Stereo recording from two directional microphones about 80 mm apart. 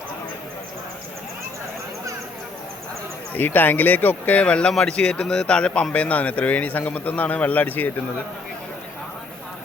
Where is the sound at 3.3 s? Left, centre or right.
Left.